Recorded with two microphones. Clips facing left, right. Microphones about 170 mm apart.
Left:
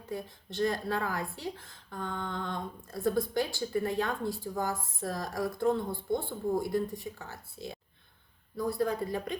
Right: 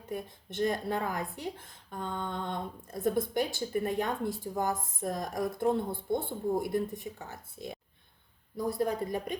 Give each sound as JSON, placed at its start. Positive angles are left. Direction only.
{"t": 0.1, "sound": "speech", "side_deg": -20}